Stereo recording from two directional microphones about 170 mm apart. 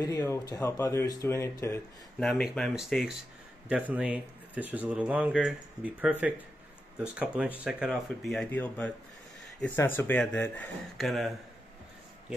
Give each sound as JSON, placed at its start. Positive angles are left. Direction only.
{"t": 0.0, "sound": "speech", "side_deg": 20}
{"t": 2.1, "sound": "speech", "side_deg": 5}